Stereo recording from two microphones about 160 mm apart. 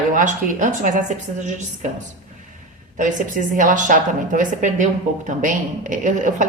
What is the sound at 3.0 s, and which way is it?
A woman's voice, 55° right (ahead or behind).